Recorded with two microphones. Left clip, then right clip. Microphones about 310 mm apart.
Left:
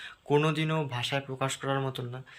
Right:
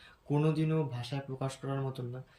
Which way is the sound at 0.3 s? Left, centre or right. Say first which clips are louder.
Left 5 dB; centre.